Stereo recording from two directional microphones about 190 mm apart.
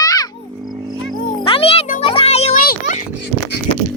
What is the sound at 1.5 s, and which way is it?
Music, 30° left (ahead or behind).